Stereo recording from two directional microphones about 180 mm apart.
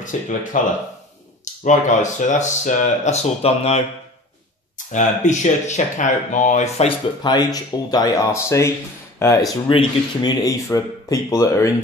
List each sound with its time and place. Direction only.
0.0 s speech: 45° left (ahead or behind)
4.9 s speech: 40° left (ahead or behind)
7.2 s speech: 20° left (ahead or behind)